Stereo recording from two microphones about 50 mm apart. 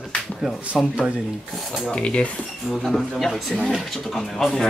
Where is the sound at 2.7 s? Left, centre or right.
Centre.